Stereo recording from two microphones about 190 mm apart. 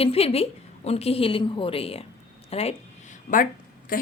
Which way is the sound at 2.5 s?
35° left (ahead or behind).